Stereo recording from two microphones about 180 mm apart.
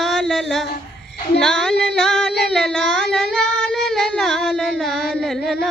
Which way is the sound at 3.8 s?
5° left (ahead or behind).